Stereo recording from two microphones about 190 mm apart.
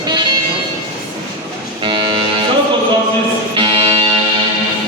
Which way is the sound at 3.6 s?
30° right (ahead or behind).